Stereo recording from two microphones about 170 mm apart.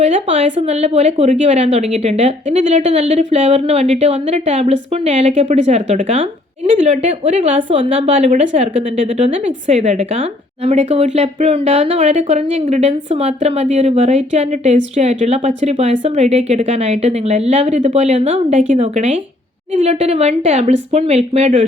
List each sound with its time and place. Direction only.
0.0 s speech: 40° right (ahead or behind)